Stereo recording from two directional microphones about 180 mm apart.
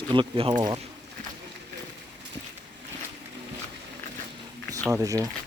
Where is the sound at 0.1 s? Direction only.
30° right (ahead or behind).